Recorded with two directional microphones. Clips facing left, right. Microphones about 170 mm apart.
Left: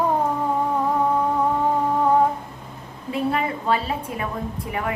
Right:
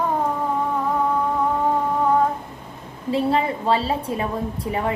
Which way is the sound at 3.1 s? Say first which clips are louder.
Right 3 dB; 30° right (ahead or behind).